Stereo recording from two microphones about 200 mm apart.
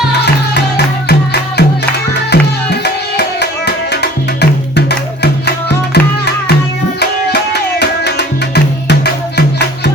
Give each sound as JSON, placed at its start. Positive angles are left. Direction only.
{"t": 1.0, "sound": "music", "side_deg": 55}